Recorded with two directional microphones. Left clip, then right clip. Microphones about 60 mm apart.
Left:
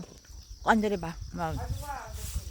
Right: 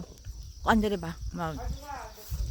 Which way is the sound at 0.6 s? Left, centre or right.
Right.